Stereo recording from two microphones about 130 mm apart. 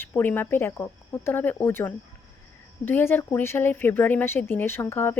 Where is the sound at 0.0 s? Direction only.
15° left (ahead or behind).